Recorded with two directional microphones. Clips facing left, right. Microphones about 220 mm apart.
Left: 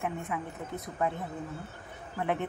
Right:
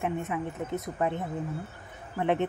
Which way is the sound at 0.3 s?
25° right (ahead or behind).